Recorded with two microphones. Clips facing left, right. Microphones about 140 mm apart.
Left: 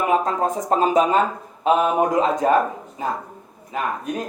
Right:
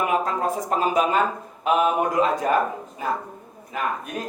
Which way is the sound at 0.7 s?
30° left (ahead or behind).